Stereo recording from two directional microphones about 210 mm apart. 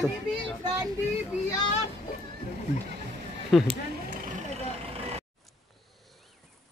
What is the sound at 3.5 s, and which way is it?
Speech, centre (ahead or behind).